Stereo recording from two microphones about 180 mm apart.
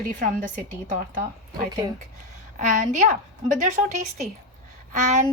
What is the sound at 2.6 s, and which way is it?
A woman's voice, 45° right (ahead or behind).